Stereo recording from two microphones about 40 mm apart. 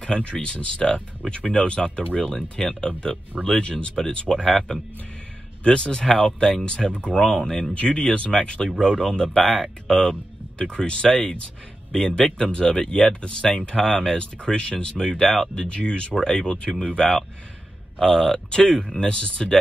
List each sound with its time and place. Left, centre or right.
0.0 s speech: left
2.6 s speech: centre
3.0 s speech: left
4.5 s speech: centre
5.6 s speech: left
6.6 s speech: left
7.3 s speech: centre
7.7 s speech: left
11.3 s speech: left
15.0 s speech: centre
15.6 s speech: left